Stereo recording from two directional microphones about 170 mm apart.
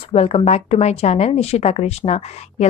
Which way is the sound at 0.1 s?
35° left (ahead or behind).